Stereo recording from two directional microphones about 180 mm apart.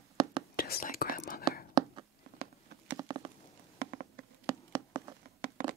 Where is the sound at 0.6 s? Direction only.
55° left (ahead or behind).